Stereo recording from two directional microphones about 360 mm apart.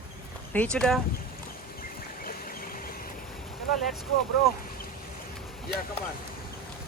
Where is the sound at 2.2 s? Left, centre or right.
Left.